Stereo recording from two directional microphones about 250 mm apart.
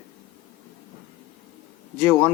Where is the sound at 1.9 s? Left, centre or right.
Centre.